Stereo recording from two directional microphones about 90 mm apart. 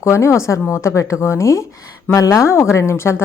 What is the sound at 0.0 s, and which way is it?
A woman's voice, 35° left (ahead or behind).